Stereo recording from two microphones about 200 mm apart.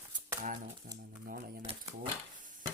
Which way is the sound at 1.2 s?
50° right (ahead or behind).